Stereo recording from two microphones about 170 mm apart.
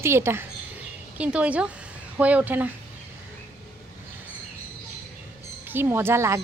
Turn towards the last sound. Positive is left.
turn(degrees=-15)  # may be behind; listen again after turning